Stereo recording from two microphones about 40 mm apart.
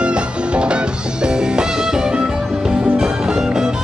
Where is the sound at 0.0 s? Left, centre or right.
Right.